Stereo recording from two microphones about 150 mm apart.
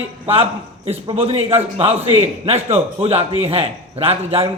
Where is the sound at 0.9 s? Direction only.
40° right (ahead or behind).